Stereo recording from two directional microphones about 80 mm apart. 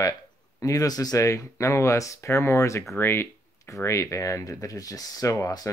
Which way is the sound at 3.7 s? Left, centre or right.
Left.